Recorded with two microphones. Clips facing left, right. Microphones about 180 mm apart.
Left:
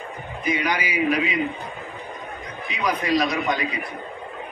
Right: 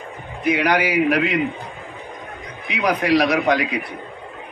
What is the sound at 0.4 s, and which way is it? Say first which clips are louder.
A man's voice: right 6 dB; 75° right (ahead or behind).